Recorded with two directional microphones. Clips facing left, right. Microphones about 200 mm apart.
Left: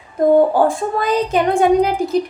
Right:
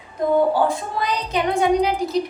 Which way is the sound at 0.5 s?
50° left (ahead or behind).